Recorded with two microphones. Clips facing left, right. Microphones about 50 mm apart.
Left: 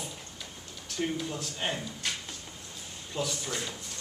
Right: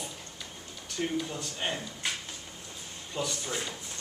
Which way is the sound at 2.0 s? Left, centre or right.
Centre.